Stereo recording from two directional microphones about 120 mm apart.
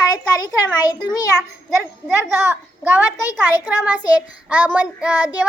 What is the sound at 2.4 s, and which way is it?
A child's voice, 20° right (ahead or behind).